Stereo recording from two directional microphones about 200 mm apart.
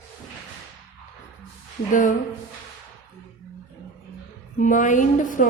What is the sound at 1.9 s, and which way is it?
Speech, 40° left (ahead or behind).